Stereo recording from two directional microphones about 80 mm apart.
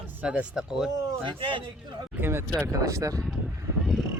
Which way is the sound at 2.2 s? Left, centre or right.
Right.